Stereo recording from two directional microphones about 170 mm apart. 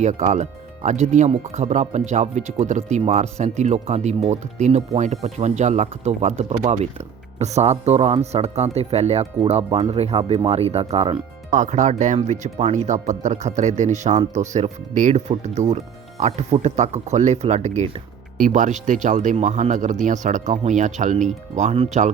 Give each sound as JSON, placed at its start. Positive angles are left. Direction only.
{"t": 0.0, "sound": "speech", "side_deg": -45}
{"t": 11.5, "sound": "speech", "side_deg": -45}